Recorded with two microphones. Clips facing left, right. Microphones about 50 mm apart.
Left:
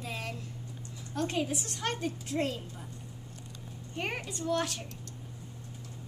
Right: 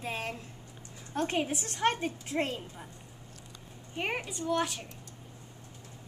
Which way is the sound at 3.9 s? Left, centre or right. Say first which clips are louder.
Right 2 dB; centre.